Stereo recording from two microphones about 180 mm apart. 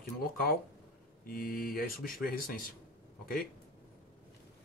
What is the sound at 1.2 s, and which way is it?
Speech, 55° left (ahead or behind).